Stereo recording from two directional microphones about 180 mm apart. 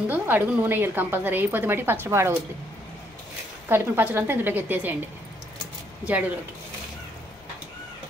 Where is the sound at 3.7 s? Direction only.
10° right (ahead or behind).